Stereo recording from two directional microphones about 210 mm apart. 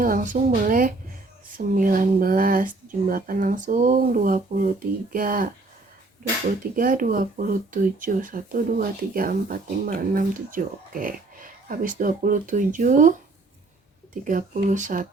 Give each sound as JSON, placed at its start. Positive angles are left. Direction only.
{"t": 0.0, "sound": "speech", "side_deg": -40}
{"t": 6.5, "sound": "speech", "side_deg": -40}